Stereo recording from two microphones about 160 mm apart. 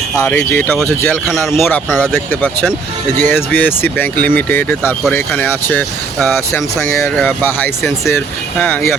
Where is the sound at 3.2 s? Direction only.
10° left (ahead or behind).